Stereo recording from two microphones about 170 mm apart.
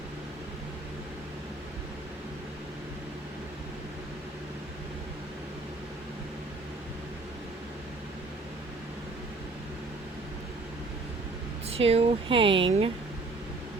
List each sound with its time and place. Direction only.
11.7 s speech: 35° right (ahead or behind)